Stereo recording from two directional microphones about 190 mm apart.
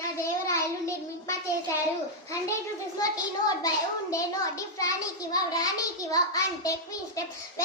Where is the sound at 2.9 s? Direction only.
20° left (ahead or behind).